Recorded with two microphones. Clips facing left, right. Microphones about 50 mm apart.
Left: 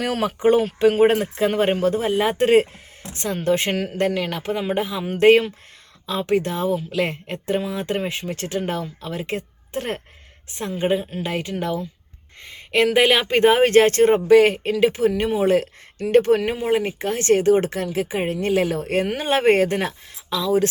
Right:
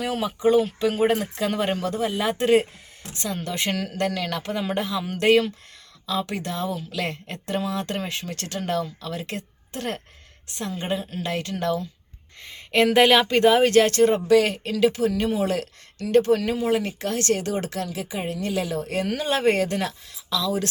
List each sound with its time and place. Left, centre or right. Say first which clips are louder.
0.0 s a woman's voice: left 3 dB; left; by 11.9 s centre
12.4 s speech: left 1 dB; centre
13.2 s speech: left 2 dB; left